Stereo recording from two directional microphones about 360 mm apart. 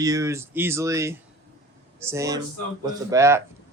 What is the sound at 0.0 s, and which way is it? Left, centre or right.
Speech, centre.